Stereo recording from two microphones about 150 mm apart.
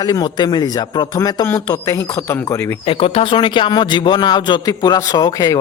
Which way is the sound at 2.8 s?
40° left (ahead or behind).